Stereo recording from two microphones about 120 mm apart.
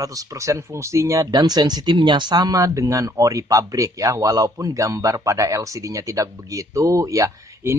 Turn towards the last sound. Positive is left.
turn(degrees=-25)  # may be behind; listen again after turning